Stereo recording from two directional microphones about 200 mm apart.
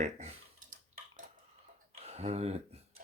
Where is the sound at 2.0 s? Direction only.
30° right (ahead or behind).